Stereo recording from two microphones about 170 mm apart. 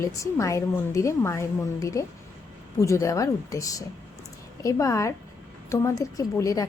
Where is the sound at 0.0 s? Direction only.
20° left (ahead or behind).